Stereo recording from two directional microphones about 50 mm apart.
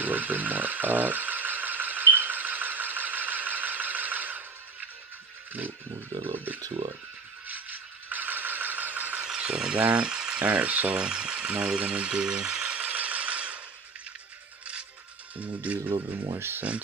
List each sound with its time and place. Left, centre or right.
0.0 s a sound: right
6.3 s speech: right
7.4 s a sound: right
9.2 s a sound: centre
9.8 s speech: right
10.0 s speech: centre; by 11.0 s right
11.0 s vehicle: centre
15.3 s speech: right
16.3 s speech: right